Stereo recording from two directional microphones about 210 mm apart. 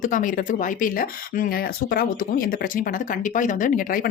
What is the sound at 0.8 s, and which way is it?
Speech, 40° left (ahead or behind).